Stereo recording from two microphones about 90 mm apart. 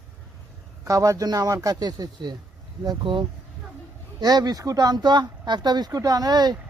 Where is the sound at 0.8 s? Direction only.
35° right (ahead or behind).